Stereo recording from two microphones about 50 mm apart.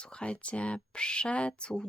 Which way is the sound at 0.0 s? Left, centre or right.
Left.